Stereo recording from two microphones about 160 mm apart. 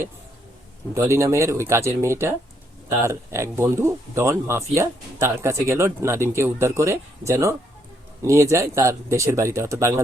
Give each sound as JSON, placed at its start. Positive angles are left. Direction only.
{"t": 0.9, "sound": "speech", "side_deg": -20}